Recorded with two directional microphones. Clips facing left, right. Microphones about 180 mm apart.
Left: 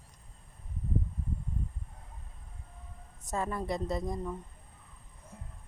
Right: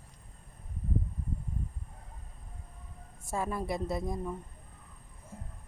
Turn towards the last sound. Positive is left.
turn(degrees=-5)  # may be behind; listen again after turning